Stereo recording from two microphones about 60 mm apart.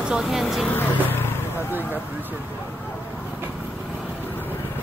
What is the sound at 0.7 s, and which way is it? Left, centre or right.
Vehicle, left.